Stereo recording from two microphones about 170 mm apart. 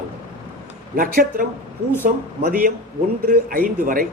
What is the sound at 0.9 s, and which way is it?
A man's voice, 55° right (ahead or behind).